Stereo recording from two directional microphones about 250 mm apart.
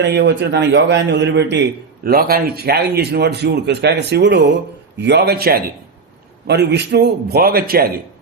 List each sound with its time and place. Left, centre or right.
0.0 s a man's voice: right